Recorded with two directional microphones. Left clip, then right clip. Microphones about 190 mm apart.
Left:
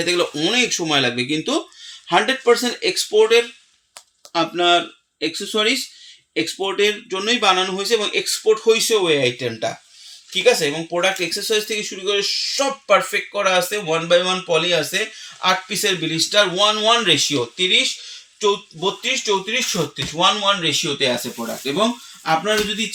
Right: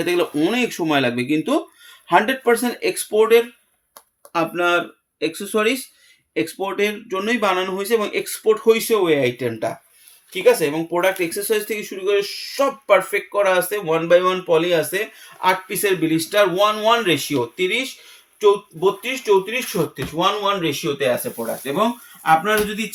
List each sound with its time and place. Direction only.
0.0 s speech: 20° right (ahead or behind)
4.3 s speech: 5° right (ahead or behind)
22.2 s speech: 5° right (ahead or behind)